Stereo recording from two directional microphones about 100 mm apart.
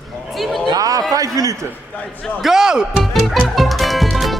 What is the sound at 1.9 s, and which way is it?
Speech, 15° left (ahead or behind).